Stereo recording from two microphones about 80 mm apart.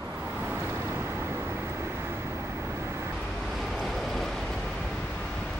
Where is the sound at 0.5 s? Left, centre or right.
Right.